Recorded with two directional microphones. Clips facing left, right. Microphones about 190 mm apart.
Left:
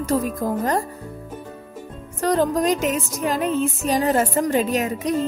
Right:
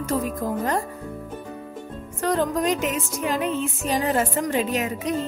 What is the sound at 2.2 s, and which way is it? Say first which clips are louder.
A woman's voice: left 3 dB; 35° left (ahead or behind).